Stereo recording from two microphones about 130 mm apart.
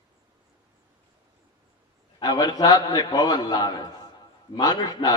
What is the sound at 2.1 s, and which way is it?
A man's voice, 35° left (ahead or behind).